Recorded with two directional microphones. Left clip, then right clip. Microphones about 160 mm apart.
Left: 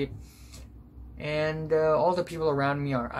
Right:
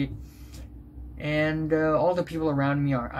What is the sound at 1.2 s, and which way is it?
Speech, 25° left (ahead or behind).